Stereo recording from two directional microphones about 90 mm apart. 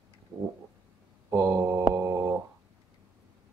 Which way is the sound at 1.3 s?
40° right (ahead or behind).